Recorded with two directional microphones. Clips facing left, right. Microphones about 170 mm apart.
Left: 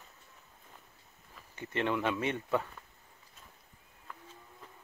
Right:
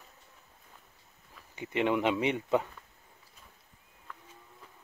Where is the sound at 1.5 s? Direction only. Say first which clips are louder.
Right 4 dB; 15° right (ahead or behind).